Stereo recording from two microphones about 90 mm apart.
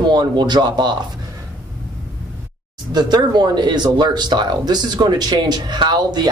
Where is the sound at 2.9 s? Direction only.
50° right (ahead or behind).